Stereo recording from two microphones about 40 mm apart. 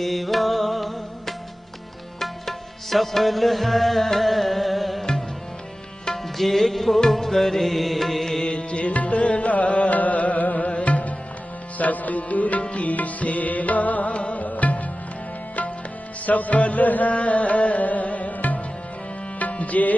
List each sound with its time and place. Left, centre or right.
0.0 s music: centre
2.1 s music: centre
6.3 s music: centre
8.5 s music: left
16.2 s music: left